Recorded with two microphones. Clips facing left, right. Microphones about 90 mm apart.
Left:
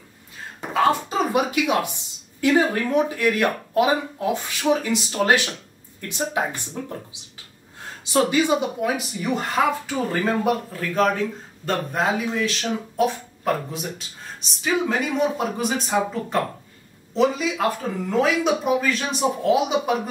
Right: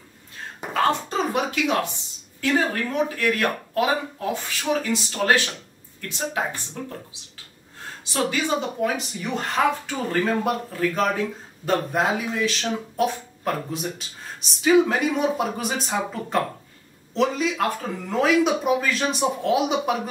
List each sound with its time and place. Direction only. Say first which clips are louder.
0.7 s a woman's voice: left 2 dB; 5° left (ahead or behind)